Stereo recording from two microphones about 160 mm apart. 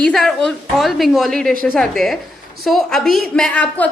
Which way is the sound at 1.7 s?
Centre (ahead or behind).